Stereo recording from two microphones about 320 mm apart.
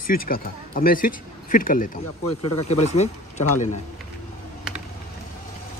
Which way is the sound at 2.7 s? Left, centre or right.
Left.